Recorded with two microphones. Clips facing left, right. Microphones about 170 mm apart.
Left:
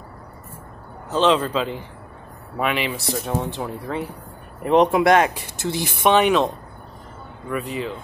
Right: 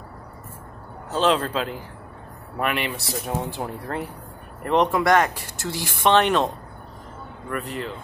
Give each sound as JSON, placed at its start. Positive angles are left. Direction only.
{"t": 1.1, "sound": "speech", "side_deg": 0}
{"t": 4.6, "sound": "speech", "side_deg": 15}